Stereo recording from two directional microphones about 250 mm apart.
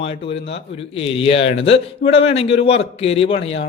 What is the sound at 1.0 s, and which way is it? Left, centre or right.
Speech, left.